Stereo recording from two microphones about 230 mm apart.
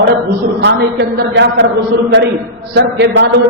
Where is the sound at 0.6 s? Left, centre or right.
Right.